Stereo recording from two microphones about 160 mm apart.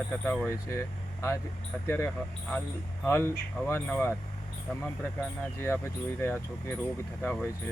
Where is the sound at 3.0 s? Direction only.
15° left (ahead or behind).